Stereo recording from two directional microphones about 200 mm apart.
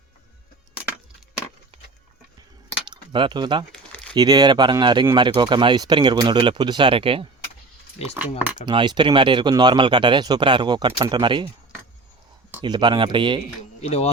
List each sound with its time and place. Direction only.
2.9 s speech: 25° right (ahead or behind)
8.0 s speech: 30° left (ahead or behind)
8.6 s speech: 20° right (ahead or behind)
12.6 s speech: 20° right (ahead or behind)
13.8 s speech: 30° left (ahead or behind)